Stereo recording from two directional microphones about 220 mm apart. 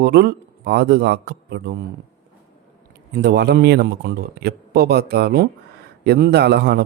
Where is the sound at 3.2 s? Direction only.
50° right (ahead or behind).